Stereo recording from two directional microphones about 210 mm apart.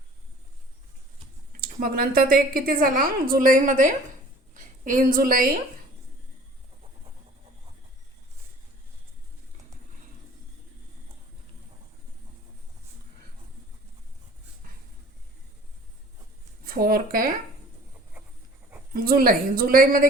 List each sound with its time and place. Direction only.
1.6 s a woman's voice: 45° right (ahead or behind)
16.6 s speech: 45° right (ahead or behind)
18.9 s a woman's voice: 45° right (ahead or behind)